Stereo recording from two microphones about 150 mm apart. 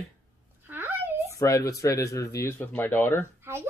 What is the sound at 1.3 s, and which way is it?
Speech, 20° left (ahead or behind).